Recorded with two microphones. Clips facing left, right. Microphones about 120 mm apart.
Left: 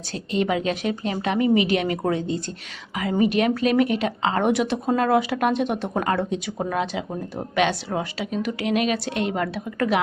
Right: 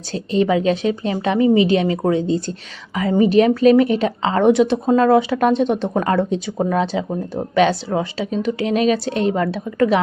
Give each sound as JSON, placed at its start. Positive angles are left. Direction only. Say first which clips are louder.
{"t": 0.1, "sound": "a woman's voice", "louder": "right 6 dB", "side_deg": -30}